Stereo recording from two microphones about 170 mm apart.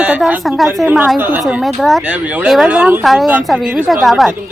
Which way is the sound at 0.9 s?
10° right (ahead or behind).